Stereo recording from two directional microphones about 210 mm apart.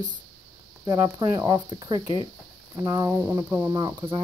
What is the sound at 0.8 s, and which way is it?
Speech, 15° right (ahead or behind).